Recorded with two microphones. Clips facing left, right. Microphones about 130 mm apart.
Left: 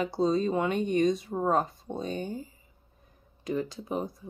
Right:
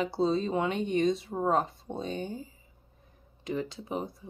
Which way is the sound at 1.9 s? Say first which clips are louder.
Left 1 dB; 20° right (ahead or behind).